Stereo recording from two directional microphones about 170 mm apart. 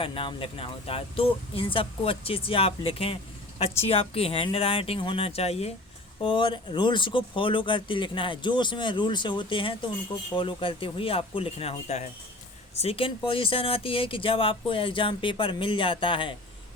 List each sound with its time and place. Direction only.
0.0 s speech: 30° left (ahead or behind)